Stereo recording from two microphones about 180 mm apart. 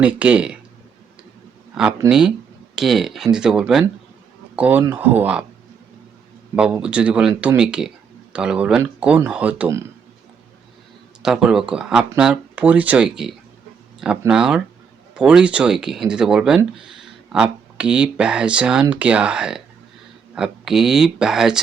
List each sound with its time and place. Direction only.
0.0 s speech: 10° right (ahead or behind)
2.0 s speech: 5° right (ahead or behind)
6.6 s speech: 5° right (ahead or behind)
11.2 s speech: 5° right (ahead or behind)